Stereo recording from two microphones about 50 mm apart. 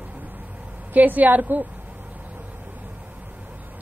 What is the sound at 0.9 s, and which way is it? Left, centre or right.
Speech, right.